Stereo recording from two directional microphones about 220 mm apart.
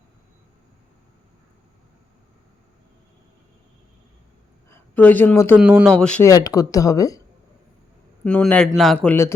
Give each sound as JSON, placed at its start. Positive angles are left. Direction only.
{"t": 4.7, "sound": "speech", "side_deg": 5}
{"t": 5.5, "sound": "a man's voice", "side_deg": -5}
{"t": 6.3, "sound": "speech", "side_deg": 15}
{"t": 8.2, "sound": "a man's voice", "side_deg": 5}